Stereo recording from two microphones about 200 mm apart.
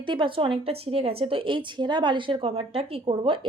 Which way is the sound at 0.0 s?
25° right (ahead or behind).